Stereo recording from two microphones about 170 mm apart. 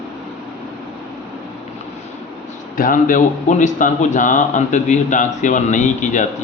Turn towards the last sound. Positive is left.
turn(degrees=45)  # may be behind; listen again after turning